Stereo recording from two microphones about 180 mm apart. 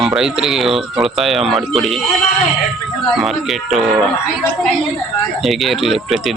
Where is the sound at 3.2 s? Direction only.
Centre (ahead or behind).